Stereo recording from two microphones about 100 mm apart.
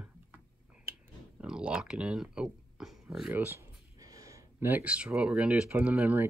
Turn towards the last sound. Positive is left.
turn(degrees=-15)  # may be behind; listen again after turning